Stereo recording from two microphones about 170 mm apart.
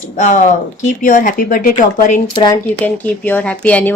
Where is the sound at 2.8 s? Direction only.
10° left (ahead or behind).